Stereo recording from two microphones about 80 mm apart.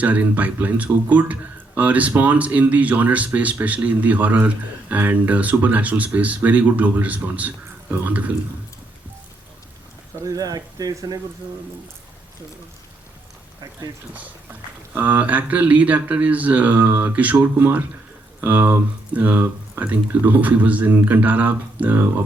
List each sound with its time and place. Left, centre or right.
0.0 s speech: centre
10.2 s speech: right
14.9 s speech: right